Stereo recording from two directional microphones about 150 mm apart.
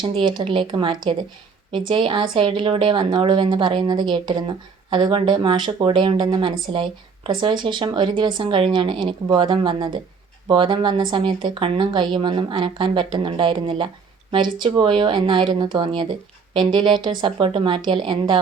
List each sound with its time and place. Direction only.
0.0 s speech: 30° right (ahead or behind)